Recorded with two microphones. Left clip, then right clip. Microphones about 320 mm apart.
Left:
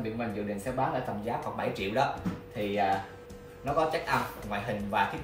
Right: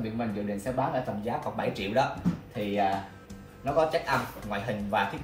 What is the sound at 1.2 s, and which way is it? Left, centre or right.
Speech, centre.